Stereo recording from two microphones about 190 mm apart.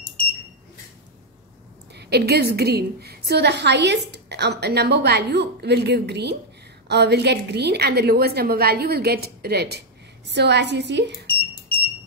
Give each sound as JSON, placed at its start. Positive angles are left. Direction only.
{"t": 2.0, "sound": "a woman's voice", "side_deg": -60}